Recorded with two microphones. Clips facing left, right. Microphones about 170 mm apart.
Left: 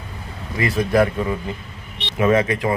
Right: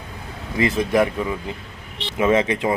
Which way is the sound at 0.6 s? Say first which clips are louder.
Left 1 dB; 20° right (ahead or behind).